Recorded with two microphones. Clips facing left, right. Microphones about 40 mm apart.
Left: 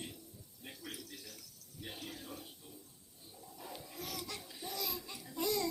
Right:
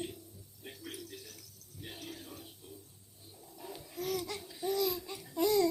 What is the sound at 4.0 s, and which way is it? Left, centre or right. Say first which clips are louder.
Laughter: right 9 dB; right.